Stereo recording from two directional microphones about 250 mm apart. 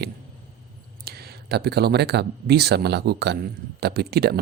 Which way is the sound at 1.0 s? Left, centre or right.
Right.